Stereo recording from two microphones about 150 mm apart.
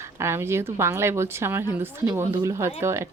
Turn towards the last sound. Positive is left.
turn(degrees=-15)  # may be behind; listen again after turning